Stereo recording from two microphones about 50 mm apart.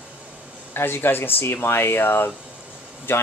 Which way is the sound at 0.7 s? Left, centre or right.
Left.